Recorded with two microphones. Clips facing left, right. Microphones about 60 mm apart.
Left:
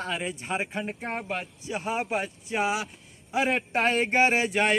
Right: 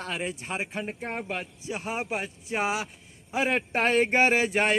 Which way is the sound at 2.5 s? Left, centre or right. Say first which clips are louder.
Left 1 dB; right.